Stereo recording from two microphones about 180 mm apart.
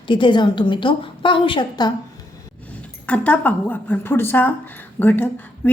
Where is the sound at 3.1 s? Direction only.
10° left (ahead or behind).